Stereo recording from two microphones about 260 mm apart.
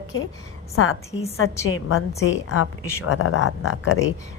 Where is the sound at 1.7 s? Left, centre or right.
Left.